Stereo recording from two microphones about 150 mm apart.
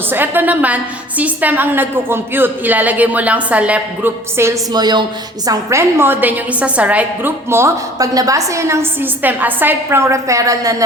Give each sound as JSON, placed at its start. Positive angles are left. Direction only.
{"t": 0.1, "sound": "a woman's voice", "side_deg": -15}
{"t": 4.7, "sound": "a woman's voice", "side_deg": -30}